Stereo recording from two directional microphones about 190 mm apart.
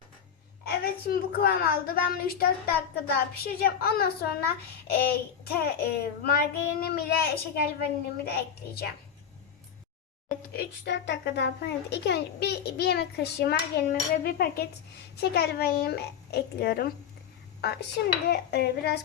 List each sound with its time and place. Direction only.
0.6 s a woman's voice: 55° left (ahead or behind)
10.2 s a child's voice: 55° left (ahead or behind)